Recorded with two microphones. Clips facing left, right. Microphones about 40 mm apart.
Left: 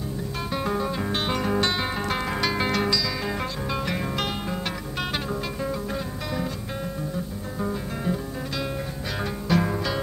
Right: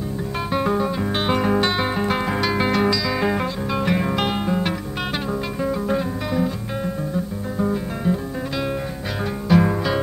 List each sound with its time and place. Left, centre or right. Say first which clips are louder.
0.5 s music: right 6 dB; centre
7.5 s guitar: right 6 dB; centre
9.5 s music: right 6 dB; centre